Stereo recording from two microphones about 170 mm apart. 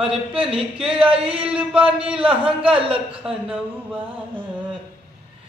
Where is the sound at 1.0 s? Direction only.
35° right (ahead or behind).